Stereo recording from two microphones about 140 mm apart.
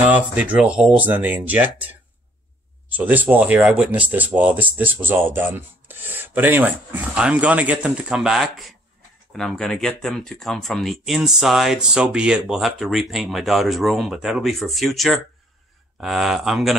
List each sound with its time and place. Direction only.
0.1 s speech: 10° right (ahead or behind)
3.0 s speech: 10° right (ahead or behind)